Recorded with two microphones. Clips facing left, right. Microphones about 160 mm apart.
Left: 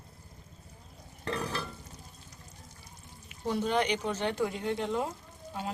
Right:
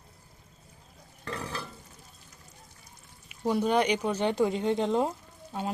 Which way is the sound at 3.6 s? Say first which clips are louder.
Right 3 dB; 10° right (ahead or behind).